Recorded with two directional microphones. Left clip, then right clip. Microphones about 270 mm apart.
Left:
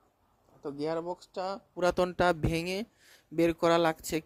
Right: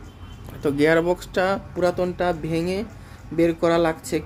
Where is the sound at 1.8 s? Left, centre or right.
Left.